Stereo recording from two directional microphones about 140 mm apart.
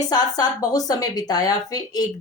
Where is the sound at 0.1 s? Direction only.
25° left (ahead or behind).